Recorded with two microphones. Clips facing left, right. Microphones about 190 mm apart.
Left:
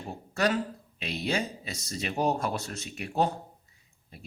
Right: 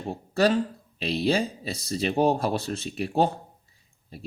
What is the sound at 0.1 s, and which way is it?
Speech, 30° right (ahead or behind).